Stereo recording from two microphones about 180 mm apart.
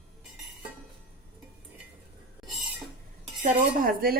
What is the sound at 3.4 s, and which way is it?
Speech, 50° right (ahead or behind).